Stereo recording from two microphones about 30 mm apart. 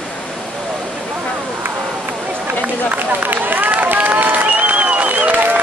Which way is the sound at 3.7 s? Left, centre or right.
Right.